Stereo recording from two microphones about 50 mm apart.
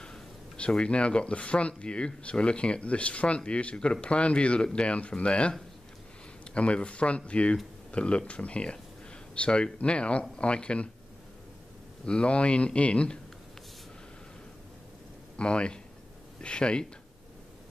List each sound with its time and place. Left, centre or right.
0.0 s speech: centre
12.1 s speech: left
15.3 s speech: left